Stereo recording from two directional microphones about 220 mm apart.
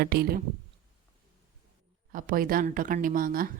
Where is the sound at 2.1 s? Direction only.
40° right (ahead or behind).